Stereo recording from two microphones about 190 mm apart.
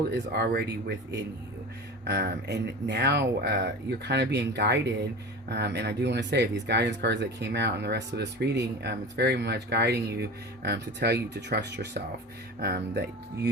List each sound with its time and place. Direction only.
0.1 s speech: 55° right (ahead or behind)